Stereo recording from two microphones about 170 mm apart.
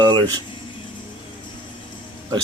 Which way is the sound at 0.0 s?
25° right (ahead or behind).